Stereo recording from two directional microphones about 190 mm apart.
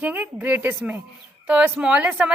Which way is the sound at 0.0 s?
10° right (ahead or behind).